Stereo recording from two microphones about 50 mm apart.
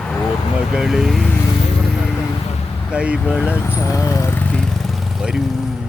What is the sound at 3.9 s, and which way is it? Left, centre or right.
Speech, left.